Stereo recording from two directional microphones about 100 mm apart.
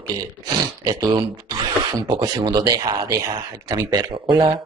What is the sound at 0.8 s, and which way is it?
Speech, 45° right (ahead or behind).